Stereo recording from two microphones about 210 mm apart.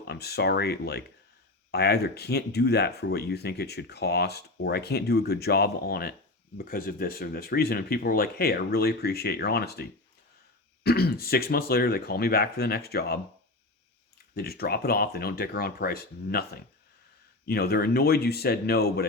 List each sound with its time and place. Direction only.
0.1 s speech: 50° left (ahead or behind)
10.8 s speech: 50° left (ahead or behind)
14.3 s speech: 50° left (ahead or behind)